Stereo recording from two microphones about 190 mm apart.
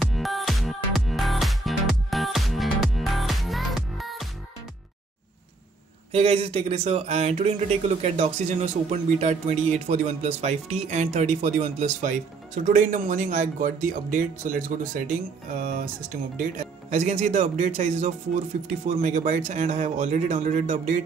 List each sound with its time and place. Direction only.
0.0 s music: centre (ahead or behind)
6.1 s speech: 30° right (ahead or behind)